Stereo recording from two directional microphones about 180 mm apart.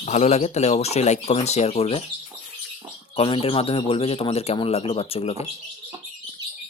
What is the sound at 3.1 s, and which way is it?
Speech, 30° left (ahead or behind).